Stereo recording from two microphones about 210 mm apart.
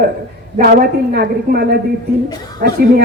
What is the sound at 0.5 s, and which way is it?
A woman's voice, 45° right (ahead or behind).